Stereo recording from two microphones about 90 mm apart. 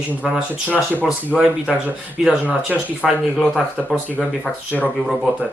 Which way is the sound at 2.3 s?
15° right (ahead or behind).